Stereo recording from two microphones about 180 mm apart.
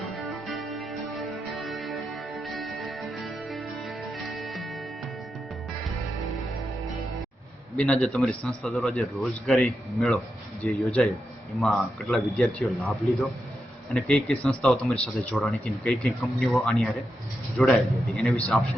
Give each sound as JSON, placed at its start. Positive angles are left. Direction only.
{"t": 0.2, "sound": "music", "side_deg": 0}
{"t": 7.8, "sound": "speech", "side_deg": 0}